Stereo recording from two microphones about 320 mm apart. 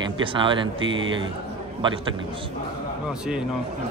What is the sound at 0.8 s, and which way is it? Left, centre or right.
Speech, right.